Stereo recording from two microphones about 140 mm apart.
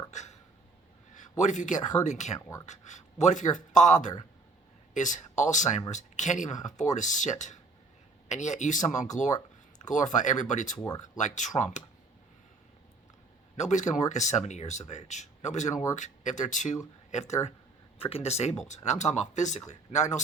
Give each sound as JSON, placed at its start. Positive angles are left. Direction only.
{"t": 0.1, "sound": "hiccup", "side_deg": 55}
{"t": 1.1, "sound": "speech", "side_deg": 60}
{"t": 10.8, "sound": "speech", "side_deg": 25}
{"t": 11.2, "sound": "speech", "side_deg": 60}
{"t": 13.6, "sound": "speech", "side_deg": 60}